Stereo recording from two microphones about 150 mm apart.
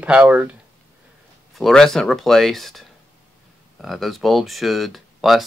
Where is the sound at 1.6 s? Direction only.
Centre (ahead or behind).